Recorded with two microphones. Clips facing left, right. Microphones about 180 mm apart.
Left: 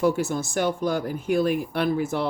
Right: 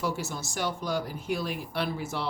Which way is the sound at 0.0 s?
55° left (ahead or behind).